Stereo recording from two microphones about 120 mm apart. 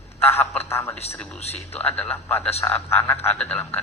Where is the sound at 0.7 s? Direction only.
20° left (ahead or behind).